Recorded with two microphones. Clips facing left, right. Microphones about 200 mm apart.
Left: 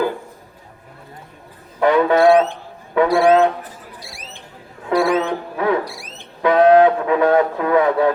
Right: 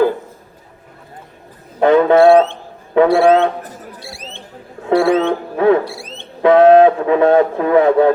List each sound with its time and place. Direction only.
1.8 s speech: 25° right (ahead or behind)
4.0 s a sound: 25° right (ahead or behind)
4.9 s music: 25° right (ahead or behind)